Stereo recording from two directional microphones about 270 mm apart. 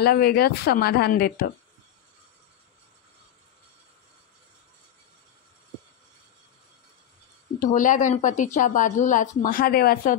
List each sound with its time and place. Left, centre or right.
0.0 s speech: left
7.6 s a woman's voice: left